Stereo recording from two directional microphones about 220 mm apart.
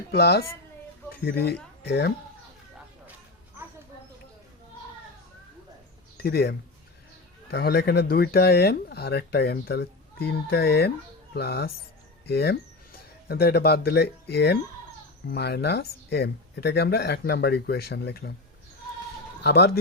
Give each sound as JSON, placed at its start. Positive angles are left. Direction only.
{"t": 0.1, "sound": "speech", "side_deg": 45}
{"t": 6.1, "sound": "speech", "side_deg": 45}
{"t": 19.4, "sound": "speech", "side_deg": 50}